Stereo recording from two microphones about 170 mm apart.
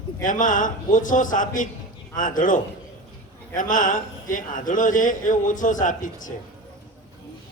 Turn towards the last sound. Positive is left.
turn(degrees=50)  # may be behind; listen again after turning